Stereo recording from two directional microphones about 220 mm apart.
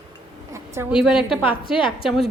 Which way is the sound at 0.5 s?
10° right (ahead or behind).